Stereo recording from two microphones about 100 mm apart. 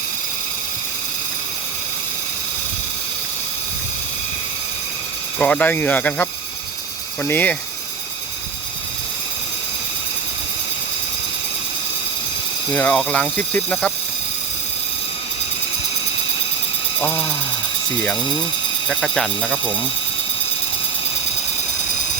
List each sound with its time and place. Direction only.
5.4 s speech: 15° left (ahead or behind)
12.7 s speech: 15° left (ahead or behind)
17.0 s speech: 15° left (ahead or behind)
18.9 s speech: 5° left (ahead or behind)